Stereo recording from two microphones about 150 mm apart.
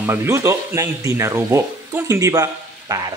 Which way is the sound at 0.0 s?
15° right (ahead or behind).